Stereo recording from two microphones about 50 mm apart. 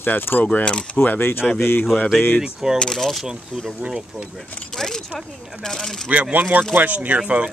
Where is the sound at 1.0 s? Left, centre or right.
Left.